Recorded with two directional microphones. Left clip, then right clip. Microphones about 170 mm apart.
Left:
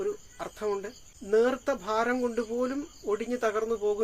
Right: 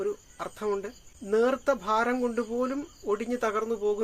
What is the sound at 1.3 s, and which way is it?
Speech, 15° right (ahead or behind).